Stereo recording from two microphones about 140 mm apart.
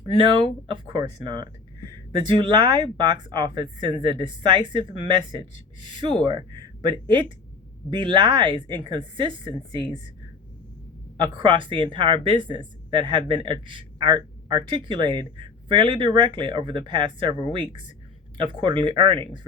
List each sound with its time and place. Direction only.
0.2 s speech: 35° right (ahead or behind)
11.2 s speech: 35° right (ahead or behind)